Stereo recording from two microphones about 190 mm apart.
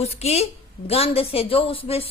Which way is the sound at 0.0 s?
35° left (ahead or behind).